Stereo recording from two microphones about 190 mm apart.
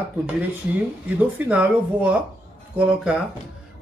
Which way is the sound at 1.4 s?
5° right (ahead or behind).